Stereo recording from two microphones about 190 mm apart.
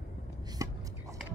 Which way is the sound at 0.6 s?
15° right (ahead or behind).